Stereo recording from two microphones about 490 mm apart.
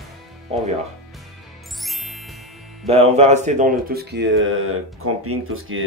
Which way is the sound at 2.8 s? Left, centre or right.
Centre.